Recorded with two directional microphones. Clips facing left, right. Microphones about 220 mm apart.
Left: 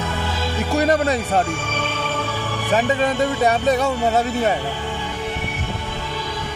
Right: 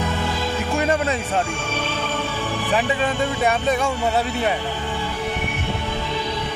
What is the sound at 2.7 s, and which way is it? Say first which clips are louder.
Speech: left 4 dB; 40° left (ahead or behind).